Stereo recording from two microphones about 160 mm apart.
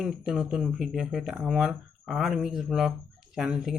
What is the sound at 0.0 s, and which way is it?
Speech, centre (ahead or behind).